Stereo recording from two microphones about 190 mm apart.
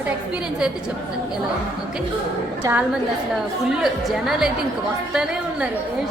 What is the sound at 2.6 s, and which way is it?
Speech, 15° right (ahead or behind).